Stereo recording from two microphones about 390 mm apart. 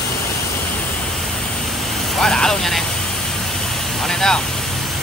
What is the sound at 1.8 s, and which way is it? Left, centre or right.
Vehicle, centre.